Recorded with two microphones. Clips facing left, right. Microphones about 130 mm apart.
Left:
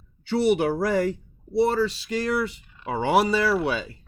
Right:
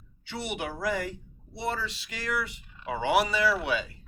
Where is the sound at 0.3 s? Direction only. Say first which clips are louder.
Left 13 dB; 35° left (ahead or behind).